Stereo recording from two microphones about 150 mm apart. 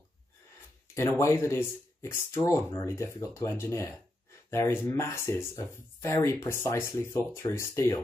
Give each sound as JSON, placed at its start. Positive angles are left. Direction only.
{"t": 0.9, "sound": "speech", "side_deg": 15}